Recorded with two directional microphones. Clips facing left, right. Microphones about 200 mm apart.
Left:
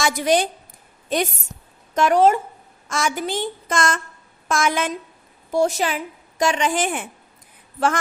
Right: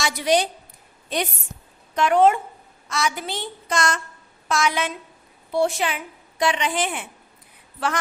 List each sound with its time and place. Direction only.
0.0 s a woman's voice: 50° left (ahead or behind)
2.0 s a woman's voice: 40° left (ahead or behind)